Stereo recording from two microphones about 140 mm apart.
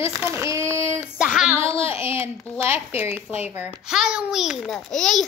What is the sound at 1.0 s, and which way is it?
Speech, 5° right (ahead or behind).